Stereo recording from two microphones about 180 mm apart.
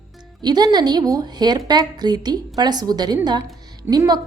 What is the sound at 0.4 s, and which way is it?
A woman's voice, 20° right (ahead or behind).